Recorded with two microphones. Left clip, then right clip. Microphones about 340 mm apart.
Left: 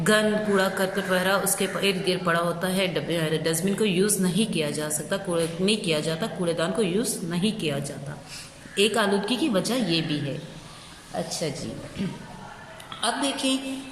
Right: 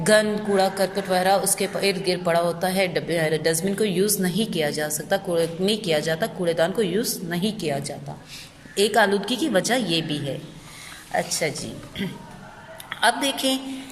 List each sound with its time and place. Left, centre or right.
0.0 s a woman's voice: centre
13.0 s a woman's voice: right